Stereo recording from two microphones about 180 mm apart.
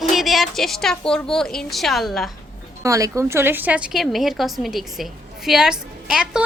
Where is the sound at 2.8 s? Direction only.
15° right (ahead or behind).